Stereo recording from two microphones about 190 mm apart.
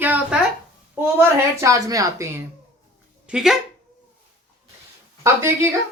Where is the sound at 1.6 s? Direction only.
20° right (ahead or behind).